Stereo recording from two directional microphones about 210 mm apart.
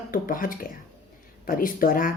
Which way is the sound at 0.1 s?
40° left (ahead or behind).